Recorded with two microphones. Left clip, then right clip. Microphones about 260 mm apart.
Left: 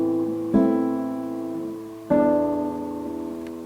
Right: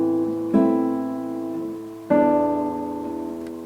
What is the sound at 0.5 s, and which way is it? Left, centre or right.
Music, centre.